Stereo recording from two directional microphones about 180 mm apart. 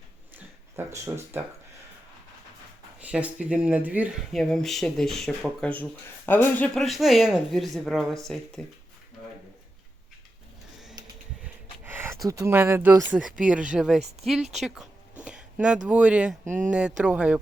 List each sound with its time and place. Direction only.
0.8 s speech: 15° right (ahead or behind)
3.0 s speech: 10° right (ahead or behind)
11.4 s snort: 10° right (ahead or behind)
12.3 s speech: 15° right (ahead or behind)
15.2 s a sound: 5° right (ahead or behind)
15.9 s speech: 5° right (ahead or behind)
16.5 s speech: 45° right (ahead or behind)
17.0 s speech: 5° right (ahead or behind)